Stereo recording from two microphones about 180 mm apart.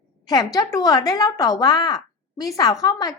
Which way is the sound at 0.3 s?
20° left (ahead or behind).